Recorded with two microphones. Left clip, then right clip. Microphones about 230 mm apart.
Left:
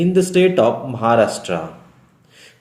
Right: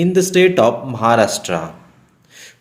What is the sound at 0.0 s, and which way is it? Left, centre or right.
Speech, right.